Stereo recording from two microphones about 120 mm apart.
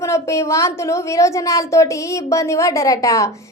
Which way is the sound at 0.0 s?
25° left (ahead or behind).